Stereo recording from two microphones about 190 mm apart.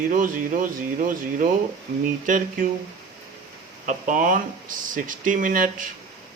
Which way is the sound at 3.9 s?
45° right (ahead or behind).